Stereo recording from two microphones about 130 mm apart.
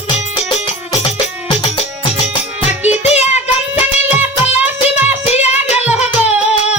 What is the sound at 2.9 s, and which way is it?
Music, 60° left (ahead or behind).